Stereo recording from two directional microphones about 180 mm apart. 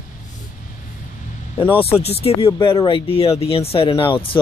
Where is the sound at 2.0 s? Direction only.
35° left (ahead or behind).